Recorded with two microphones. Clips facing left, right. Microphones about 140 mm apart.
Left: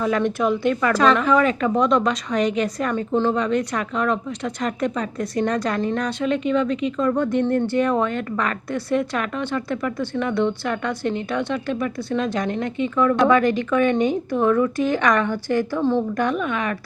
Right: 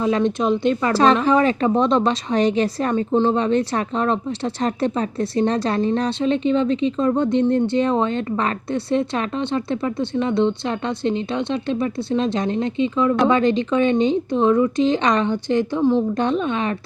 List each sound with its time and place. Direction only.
0.0 s speech: 20° right (ahead or behind)
16.2 s speech: 25° right (ahead or behind)